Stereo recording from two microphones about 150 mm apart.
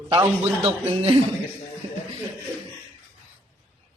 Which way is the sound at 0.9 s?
40° right (ahead or behind).